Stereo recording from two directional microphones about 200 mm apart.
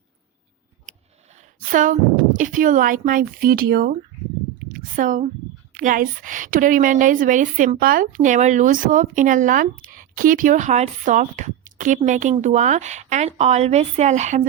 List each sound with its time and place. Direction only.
0.9 s speech: 35° right (ahead or behind)
4.7 s a sound: 40° right (ahead or behind)
5.7 s a woman's voice: 40° right (ahead or behind)